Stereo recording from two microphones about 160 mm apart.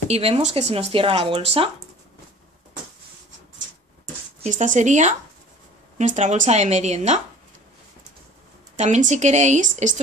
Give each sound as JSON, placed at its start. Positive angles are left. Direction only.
{"t": 0.1, "sound": "speech", "side_deg": -40}
{"t": 4.0, "sound": "a sound", "side_deg": -45}
{"t": 5.9, "sound": "a woman's voice", "side_deg": -50}
{"t": 8.7, "sound": "a woman's voice", "side_deg": -45}